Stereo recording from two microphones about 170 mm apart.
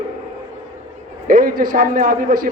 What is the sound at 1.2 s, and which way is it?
A man's voice, 55° right (ahead or behind).